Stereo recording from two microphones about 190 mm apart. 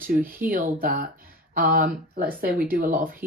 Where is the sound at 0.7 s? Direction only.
50° right (ahead or behind).